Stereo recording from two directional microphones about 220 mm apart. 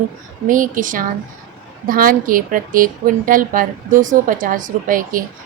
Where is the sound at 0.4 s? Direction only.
40° right (ahead or behind).